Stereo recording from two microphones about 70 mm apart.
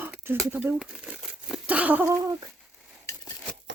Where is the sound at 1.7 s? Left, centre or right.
Right.